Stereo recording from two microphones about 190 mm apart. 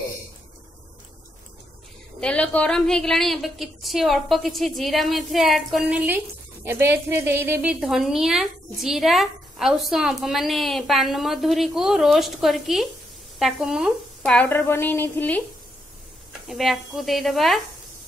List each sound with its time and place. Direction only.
2.1 s a woman's voice: 5° left (ahead or behind)
16.4 s a woman's voice: centre (ahead or behind)